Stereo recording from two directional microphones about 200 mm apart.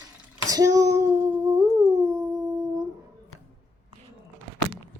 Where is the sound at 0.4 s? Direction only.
15° right (ahead or behind).